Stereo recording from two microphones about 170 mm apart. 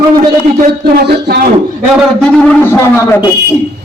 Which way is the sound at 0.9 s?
65° right (ahead or behind).